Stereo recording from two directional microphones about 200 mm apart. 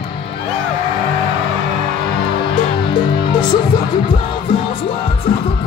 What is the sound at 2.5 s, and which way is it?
Music, 25° left (ahead or behind).